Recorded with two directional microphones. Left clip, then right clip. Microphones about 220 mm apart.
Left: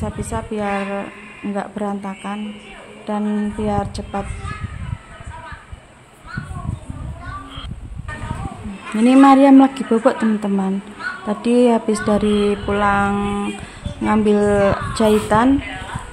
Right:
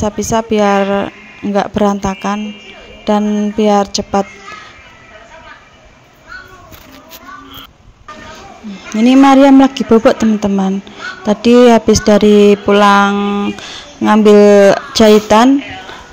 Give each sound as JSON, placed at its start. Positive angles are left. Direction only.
{"t": 0.0, "sound": "speech", "side_deg": -30}
{"t": 8.9, "sound": "speech", "side_deg": -20}
{"t": 13.1, "sound": "speech", "side_deg": -20}